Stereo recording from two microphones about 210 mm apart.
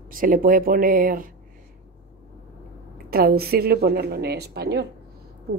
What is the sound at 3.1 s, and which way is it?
A woman's voice, 45° right (ahead or behind).